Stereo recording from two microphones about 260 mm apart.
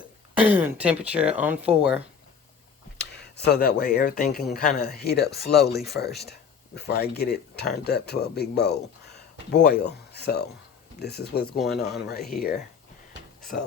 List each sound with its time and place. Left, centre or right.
0.3 s speech: centre
3.0 s speech: left
11.5 s speech: centre
12.3 s speech: left